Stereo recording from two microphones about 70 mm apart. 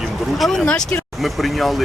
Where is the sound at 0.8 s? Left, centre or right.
Centre.